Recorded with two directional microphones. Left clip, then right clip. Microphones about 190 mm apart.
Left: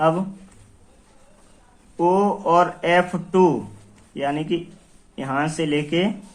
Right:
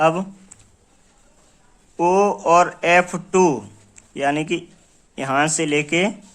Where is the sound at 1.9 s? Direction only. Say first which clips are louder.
Right 2 dB; 40° right (ahead or behind).